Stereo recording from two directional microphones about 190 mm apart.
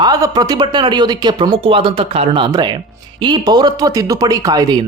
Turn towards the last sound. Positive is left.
turn(degrees=-20)  # may be behind; listen again after turning